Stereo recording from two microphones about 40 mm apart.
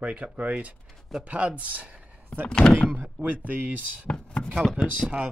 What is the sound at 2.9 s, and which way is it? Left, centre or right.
Speech, right.